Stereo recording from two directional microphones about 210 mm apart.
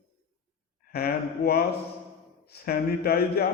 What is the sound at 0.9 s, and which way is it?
Speech, 45° left (ahead or behind).